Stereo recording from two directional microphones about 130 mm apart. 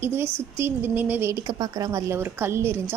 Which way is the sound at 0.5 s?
15° right (ahead or behind).